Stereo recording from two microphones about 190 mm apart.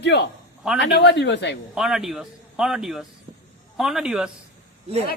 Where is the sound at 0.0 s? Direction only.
60° left (ahead or behind).